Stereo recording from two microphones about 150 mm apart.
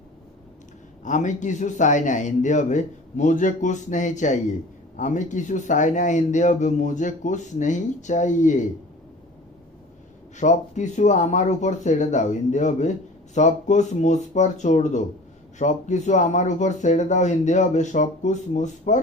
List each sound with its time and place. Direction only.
1.0 s a man's voice: 55° left (ahead or behind)
10.3 s speech: 55° left (ahead or behind)